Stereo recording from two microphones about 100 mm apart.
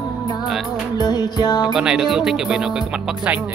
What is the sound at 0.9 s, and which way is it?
Music, 40° left (ahead or behind).